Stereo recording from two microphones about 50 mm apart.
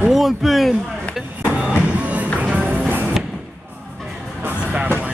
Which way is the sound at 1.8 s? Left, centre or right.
Right.